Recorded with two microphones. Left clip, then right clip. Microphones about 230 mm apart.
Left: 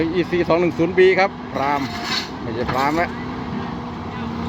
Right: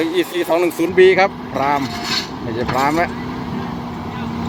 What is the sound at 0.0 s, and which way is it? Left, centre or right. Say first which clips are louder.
Speech: right 1 dB; centre.